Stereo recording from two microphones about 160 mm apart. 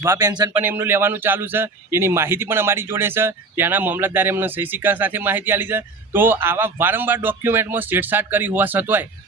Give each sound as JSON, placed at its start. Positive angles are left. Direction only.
{"t": 0.0, "sound": "speech", "side_deg": -20}
{"t": 0.6, "sound": "a man's voice", "side_deg": -15}